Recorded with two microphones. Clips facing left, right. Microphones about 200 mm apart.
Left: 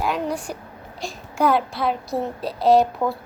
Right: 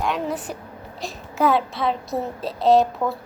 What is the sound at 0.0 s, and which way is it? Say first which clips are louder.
A child's voice: left 1 dB; centre (ahead or behind).